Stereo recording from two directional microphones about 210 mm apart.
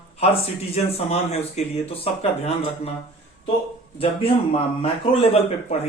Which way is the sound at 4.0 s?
25° left (ahead or behind).